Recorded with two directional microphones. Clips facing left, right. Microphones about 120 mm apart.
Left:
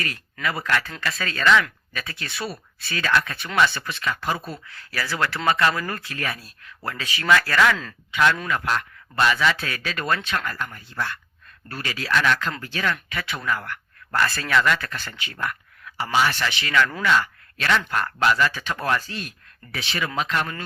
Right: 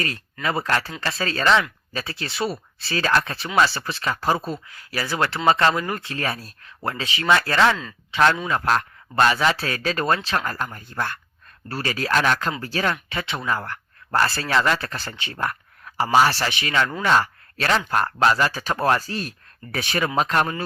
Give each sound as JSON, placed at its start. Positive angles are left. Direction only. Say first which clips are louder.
{"t": 0.4, "sound": "speech", "louder": "right 2 dB", "side_deg": -30}
{"t": 4.5, "sound": "speech", "louder": "right 2 dB", "side_deg": -15}
{"t": 11.7, "sound": "speech", "louder": "right 2 dB", "side_deg": -35}
{"t": 16.5, "sound": "speech", "louder": "left 1 dB", "side_deg": -20}
{"t": 17.1, "sound": "speech", "louder": "right 2 dB", "side_deg": -40}